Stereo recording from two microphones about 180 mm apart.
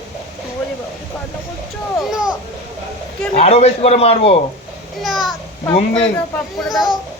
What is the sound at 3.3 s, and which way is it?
A man's voice, 35° left (ahead or behind).